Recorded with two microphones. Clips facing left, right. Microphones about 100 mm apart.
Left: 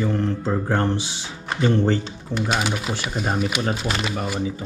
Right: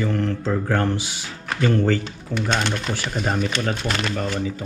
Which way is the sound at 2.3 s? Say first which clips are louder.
Even; 5° left (ahead or behind).